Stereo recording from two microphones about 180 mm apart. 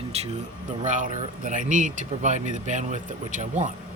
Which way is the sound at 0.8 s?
45° right (ahead or behind).